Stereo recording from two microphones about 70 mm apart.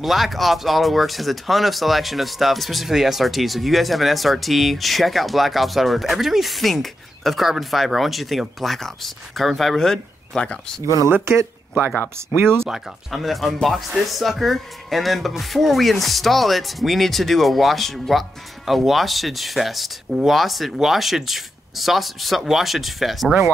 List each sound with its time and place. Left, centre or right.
0.0 s speech: centre
11.1 s speech: right
12.6 s speech: centre